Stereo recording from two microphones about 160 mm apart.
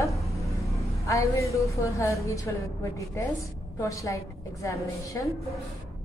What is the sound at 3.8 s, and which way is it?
A woman's voice, 20° left (ahead or behind).